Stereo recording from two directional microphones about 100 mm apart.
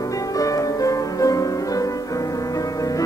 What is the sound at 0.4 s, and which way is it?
Music, 35° left (ahead or behind).